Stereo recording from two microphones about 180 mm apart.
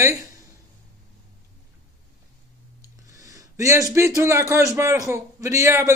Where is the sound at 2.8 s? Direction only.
20° right (ahead or behind).